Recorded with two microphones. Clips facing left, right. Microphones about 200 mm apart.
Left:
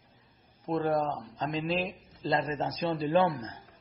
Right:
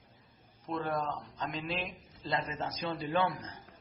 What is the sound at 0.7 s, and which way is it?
A man's voice, 35° left (ahead or behind).